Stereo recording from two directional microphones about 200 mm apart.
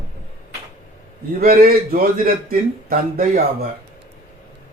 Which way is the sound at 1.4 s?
50° right (ahead or behind).